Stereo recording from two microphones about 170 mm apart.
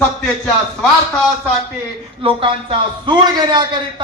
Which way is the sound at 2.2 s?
30° right (ahead or behind).